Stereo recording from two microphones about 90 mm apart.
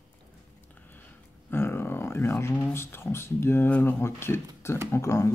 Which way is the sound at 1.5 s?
25° left (ahead or behind).